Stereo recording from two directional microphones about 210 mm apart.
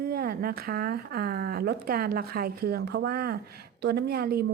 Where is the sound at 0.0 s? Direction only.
45° right (ahead or behind).